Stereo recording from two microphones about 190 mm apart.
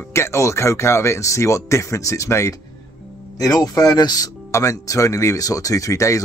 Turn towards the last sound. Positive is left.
turn(degrees=15)  # may be behind; listen again after turning